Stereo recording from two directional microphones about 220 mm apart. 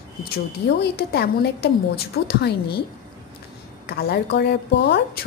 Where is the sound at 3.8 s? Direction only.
45° left (ahead or behind).